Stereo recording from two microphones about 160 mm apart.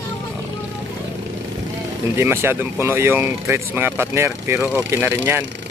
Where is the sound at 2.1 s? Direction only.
15° right (ahead or behind).